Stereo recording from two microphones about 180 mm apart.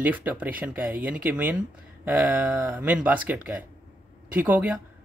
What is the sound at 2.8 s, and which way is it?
Speech, 5° right (ahead or behind).